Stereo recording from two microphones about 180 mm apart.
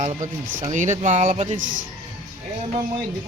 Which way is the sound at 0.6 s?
40° right (ahead or behind).